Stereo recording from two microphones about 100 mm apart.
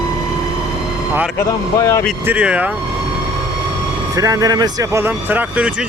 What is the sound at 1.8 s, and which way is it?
Speech, 35° left (ahead or behind).